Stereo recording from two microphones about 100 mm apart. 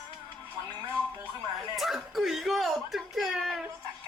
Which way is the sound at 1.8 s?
Centre (ahead or behind).